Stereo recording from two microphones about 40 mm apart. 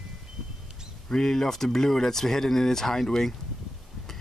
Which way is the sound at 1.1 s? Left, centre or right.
Centre.